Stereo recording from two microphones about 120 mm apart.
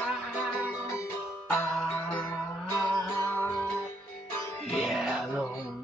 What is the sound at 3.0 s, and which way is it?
Music, 10° left (ahead or behind).